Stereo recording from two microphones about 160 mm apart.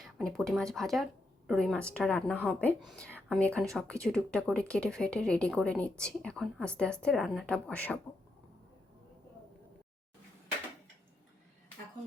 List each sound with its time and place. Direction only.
0.0 s a woman's voice: centre (ahead or behind)